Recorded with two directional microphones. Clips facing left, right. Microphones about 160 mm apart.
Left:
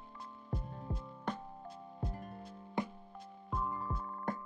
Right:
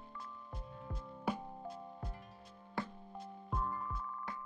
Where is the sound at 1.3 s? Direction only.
10° right (ahead or behind).